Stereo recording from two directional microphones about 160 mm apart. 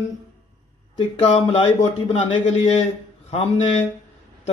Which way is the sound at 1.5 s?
35° left (ahead or behind).